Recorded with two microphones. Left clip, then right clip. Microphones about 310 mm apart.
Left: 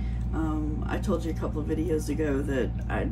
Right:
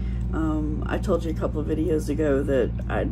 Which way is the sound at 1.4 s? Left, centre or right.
Centre.